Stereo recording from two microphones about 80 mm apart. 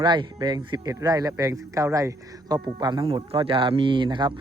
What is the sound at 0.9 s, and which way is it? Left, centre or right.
Speech, right.